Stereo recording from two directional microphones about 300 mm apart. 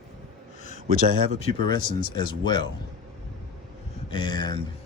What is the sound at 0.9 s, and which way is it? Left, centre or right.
Speech, right.